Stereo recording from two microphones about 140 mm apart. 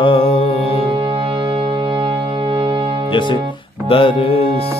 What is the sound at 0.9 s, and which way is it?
Music, 35° right (ahead or behind).